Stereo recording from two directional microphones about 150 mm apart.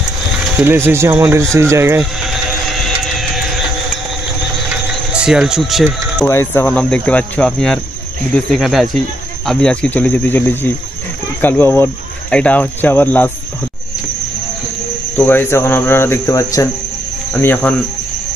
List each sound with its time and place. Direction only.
0.6 s speech: 15° right (ahead or behind)
2.0 s speech: centre (ahead or behind)
3.0 s music: centre (ahead or behind)
4.8 s a sound: 5° right (ahead or behind)
6.2 s speech: 15° left (ahead or behind)
15.1 s speech: 15° left (ahead or behind)